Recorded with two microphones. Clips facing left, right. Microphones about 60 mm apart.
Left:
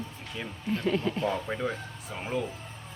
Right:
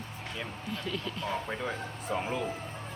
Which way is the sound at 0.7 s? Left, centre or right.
Left.